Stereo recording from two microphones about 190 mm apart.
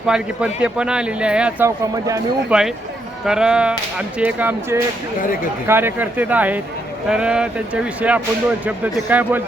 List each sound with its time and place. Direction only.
0.1 s speech: 5° right (ahead or behind)
2.5 s speech: 5° right (ahead or behind)
5.2 s speech: 45° left (ahead or behind)
5.6 s speech: 10° right (ahead or behind)